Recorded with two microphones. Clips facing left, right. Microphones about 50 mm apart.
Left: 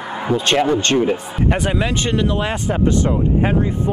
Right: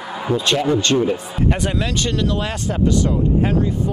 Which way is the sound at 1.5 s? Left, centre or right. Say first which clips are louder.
Left 3 dB; centre.